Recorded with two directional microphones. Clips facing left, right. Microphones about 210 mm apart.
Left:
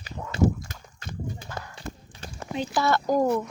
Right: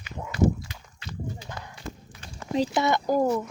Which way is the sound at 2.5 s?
35° right (ahead or behind).